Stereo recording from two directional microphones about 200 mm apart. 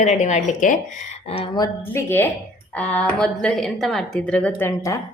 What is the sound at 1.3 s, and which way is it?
A woman's voice, 25° left (ahead or behind).